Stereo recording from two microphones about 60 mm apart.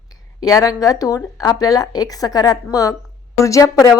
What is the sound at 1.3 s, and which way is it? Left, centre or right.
A woman's voice, left.